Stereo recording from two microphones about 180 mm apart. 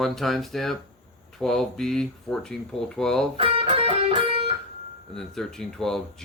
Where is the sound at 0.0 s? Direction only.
Centre (ahead or behind).